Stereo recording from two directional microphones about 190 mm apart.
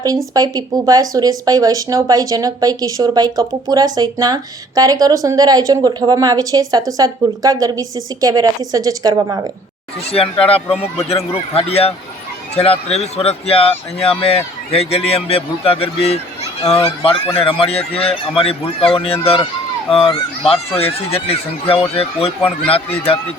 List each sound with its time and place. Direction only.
0.3 s a woman's voice: 20° right (ahead or behind)
10.0 s speech: 30° left (ahead or behind)